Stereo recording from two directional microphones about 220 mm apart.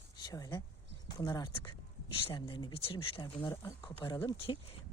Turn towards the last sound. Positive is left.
turn(degrees=25)  # may be behind; listen again after turning